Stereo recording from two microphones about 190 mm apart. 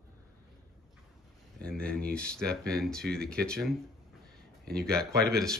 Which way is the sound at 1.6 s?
5° left (ahead or behind).